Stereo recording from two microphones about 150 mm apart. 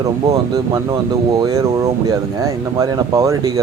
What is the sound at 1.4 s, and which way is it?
A man's voice, 25° right (ahead or behind).